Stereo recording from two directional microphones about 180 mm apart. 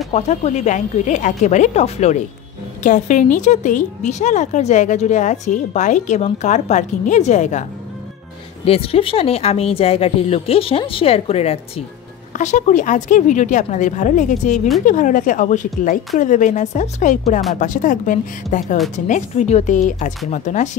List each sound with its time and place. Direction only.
0.1 s a woman's voice: 40° left (ahead or behind)
8.6 s a woman's voice: 35° left (ahead or behind)